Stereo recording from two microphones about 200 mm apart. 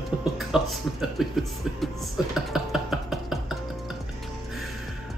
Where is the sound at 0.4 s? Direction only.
Centre (ahead or behind).